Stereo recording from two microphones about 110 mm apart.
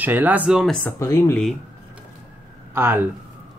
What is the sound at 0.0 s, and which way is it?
Speech, 15° right (ahead or behind).